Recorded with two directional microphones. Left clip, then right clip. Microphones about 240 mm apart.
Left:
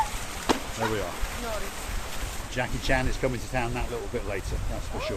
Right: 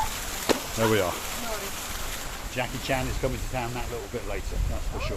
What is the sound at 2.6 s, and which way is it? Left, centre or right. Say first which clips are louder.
Speech: left 1 dB; centre.